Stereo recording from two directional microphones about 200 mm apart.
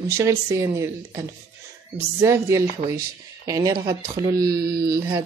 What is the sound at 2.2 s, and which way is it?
Speech, 15° right (ahead or behind).